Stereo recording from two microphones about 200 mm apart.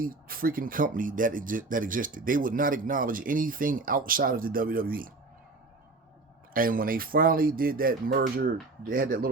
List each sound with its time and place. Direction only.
0.0 s speech: 45° right (ahead or behind)
6.5 s speech: 45° right (ahead or behind)